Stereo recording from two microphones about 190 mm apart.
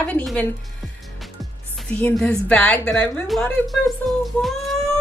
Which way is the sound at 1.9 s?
10° left (ahead or behind).